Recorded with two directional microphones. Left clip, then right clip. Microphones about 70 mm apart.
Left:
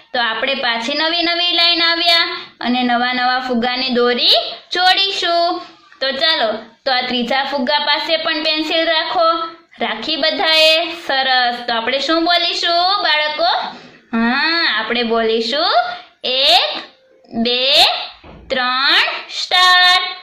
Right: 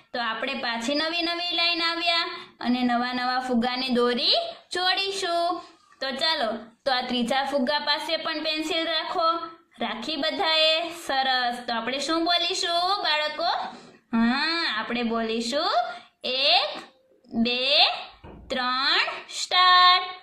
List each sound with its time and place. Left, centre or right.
0.1 s child singing: right
3.7 s a woman's voice: right
4.8 s child singing: right
8.7 s a woman's voice: right
11.1 s child singing: right
14.1 s speech: right
15.3 s a woman's voice: right
19.5 s child singing: right